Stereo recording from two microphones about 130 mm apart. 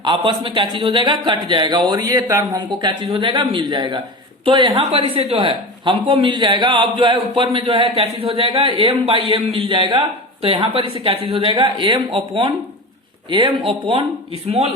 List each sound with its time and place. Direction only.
0.0 s a man's voice: 40° right (ahead or behind)